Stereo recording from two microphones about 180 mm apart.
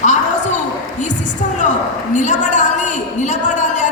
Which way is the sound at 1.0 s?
45° left (ahead or behind).